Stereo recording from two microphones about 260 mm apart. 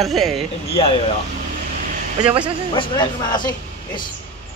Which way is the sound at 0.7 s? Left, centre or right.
Centre.